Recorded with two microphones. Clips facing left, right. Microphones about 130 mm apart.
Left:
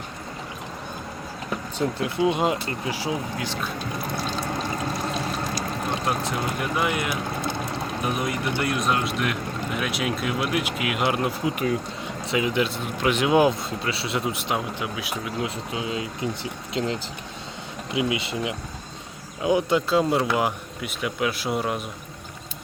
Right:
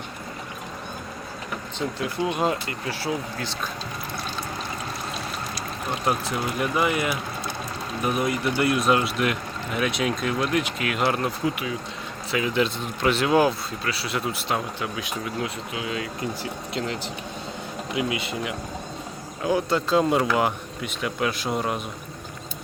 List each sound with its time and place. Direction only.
2.0 s speech: 20° left (ahead or behind)
6.1 s speech: centre (ahead or behind); by 14.8 s 15° left (ahead or behind)
15.4 s speech: 25° left (ahead or behind)
20.0 s speech: centre (ahead or behind)